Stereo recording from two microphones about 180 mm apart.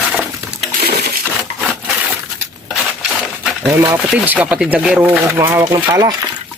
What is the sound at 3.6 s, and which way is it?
Speech, 10° right (ahead or behind).